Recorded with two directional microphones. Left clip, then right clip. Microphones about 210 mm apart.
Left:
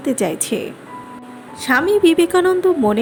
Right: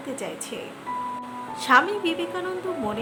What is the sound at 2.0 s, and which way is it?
Speech, 40° left (ahead or behind).